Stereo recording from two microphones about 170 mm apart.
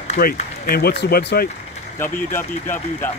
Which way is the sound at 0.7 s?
70° left (ahead or behind).